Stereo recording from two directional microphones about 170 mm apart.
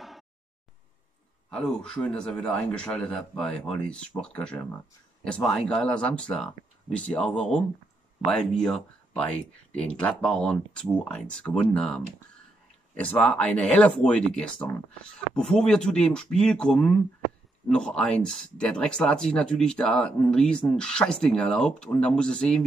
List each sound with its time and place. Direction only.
1.5 s speech: 5° left (ahead or behind)